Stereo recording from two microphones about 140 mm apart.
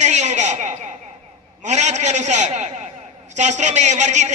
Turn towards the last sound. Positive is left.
turn(degrees=-55)  # may be behind; listen again after turning